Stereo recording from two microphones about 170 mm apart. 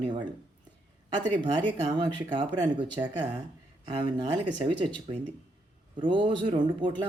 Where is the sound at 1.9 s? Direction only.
30° right (ahead or behind).